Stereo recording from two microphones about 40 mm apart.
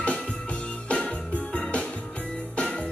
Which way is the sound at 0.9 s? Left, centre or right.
Left.